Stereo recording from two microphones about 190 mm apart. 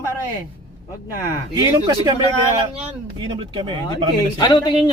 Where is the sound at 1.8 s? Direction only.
20° right (ahead or behind).